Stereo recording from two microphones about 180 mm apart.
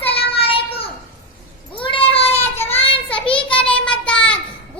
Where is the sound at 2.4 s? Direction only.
10° left (ahead or behind).